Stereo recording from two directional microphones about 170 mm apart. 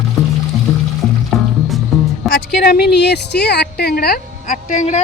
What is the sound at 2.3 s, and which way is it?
A woman's voice, 70° left (ahead or behind).